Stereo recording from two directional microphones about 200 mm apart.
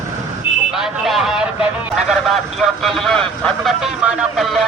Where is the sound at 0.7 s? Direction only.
Centre (ahead or behind).